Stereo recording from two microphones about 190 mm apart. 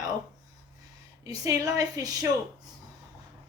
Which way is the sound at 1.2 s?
20° right (ahead or behind).